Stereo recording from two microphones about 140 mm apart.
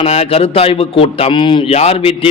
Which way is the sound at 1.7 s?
45° left (ahead or behind).